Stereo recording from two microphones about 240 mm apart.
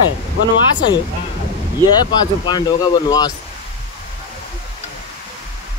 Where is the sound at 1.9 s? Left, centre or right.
Centre.